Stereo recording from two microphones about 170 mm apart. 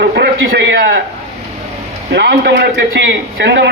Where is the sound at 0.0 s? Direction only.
70° right (ahead or behind).